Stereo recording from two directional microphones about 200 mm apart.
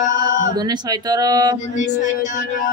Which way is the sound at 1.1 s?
20° right (ahead or behind).